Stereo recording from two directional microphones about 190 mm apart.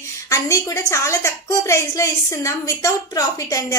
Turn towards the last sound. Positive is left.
turn(degrees=15)  # may be behind; listen again after turning